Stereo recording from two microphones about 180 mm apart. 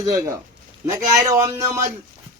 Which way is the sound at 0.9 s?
20° right (ahead or behind).